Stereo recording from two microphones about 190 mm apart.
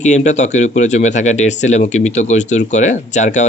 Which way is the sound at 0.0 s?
40° left (ahead or behind).